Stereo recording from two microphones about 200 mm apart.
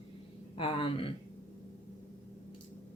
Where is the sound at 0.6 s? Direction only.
30° left (ahead or behind).